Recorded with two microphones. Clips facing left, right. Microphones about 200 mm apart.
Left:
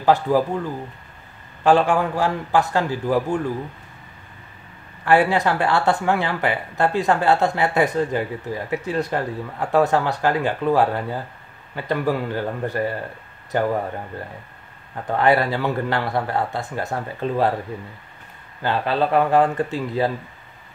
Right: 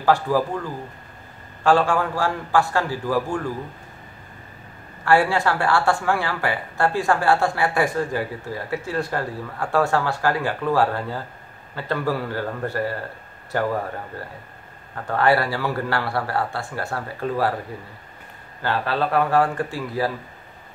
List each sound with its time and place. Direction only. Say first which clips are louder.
0.0 s a woman's voice: left 2 dB; 20° left (ahead or behind)
1.6 s a woman's voice: left 2 dB; 20° left (ahead or behind)
5.0 s a woman's voice: left 1 dB; 20° left (ahead or behind)
15.0 s a woman's voice: left 1 dB; 20° left (ahead or behind)
18.6 s a woman's voice: left 2 dB; 20° left (ahead or behind)